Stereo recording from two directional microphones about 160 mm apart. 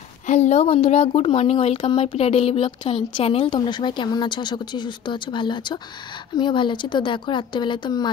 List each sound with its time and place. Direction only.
0.3 s speech: 45° left (ahead or behind); by 8.1 s 25° left (ahead or behind)